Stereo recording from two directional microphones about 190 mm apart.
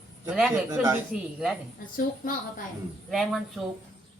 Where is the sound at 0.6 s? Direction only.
15° right (ahead or behind).